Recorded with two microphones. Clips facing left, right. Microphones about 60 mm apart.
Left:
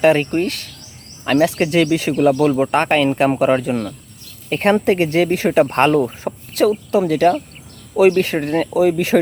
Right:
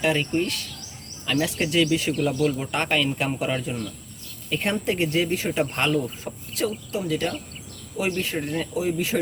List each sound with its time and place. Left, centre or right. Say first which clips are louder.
0.0 s speech: left 9 dB; left
2.4 s speech: left 9 dB; left
4.4 s speech: left 10 dB; left
5.6 s speech: left 9 dB; left
7.1 s speech: left 12 dB; left